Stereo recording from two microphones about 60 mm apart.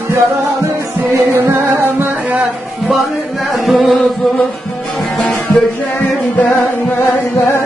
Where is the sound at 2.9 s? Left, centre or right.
Centre.